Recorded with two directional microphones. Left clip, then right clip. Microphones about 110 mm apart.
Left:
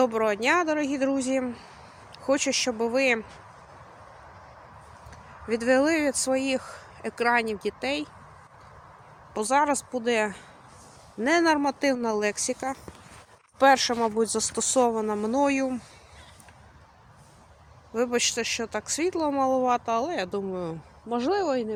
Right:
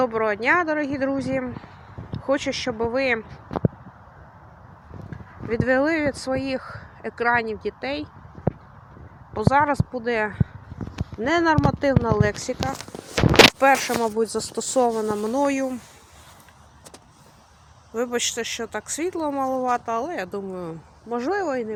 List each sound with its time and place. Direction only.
0.0 s speech: 25° left (ahead or behind)
5.5 s speech: 25° left (ahead or behind)
9.3 s speech: 20° left (ahead or behind)
13.6 s speech: centre (ahead or behind)
17.9 s a woman's voice: 10° left (ahead or behind)